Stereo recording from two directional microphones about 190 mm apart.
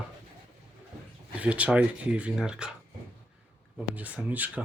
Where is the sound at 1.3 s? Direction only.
5° right (ahead or behind).